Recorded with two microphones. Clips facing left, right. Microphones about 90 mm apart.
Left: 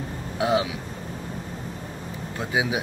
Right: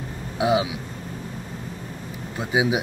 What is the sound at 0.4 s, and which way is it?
Speech, 15° right (ahead or behind).